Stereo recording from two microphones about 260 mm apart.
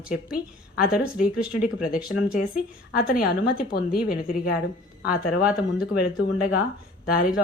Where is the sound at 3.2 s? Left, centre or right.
Left.